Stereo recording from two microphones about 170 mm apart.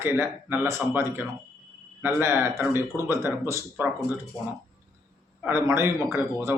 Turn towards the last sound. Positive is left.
turn(degrees=-15)  # may be behind; listen again after turning